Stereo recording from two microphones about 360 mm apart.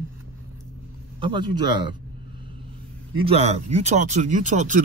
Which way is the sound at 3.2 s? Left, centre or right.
Centre.